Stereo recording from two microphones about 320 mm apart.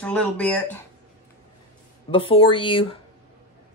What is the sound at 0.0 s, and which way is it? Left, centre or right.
Speech, centre.